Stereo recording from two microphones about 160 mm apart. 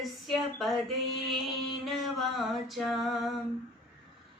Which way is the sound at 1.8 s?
Centre (ahead or behind).